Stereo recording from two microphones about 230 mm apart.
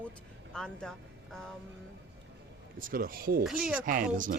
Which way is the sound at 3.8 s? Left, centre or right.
Right.